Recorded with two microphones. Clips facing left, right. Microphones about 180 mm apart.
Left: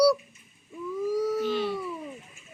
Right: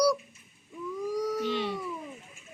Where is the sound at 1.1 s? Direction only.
5° left (ahead or behind).